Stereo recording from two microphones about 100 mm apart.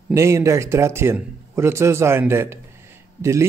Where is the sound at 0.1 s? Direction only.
30° right (ahead or behind).